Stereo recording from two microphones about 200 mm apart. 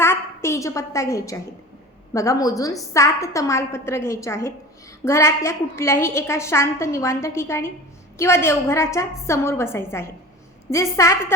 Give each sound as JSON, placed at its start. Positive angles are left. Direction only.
{"t": 0.0, "sound": "a woman's voice", "side_deg": 15}